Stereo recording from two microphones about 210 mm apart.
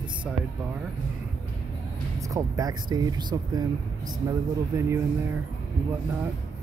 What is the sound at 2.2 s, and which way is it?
Speech, 15° right (ahead or behind).